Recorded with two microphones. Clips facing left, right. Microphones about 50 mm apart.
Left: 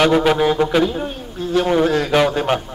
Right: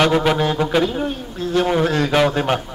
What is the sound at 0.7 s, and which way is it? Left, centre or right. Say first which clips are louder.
A man's voice: left 1 dB; centre.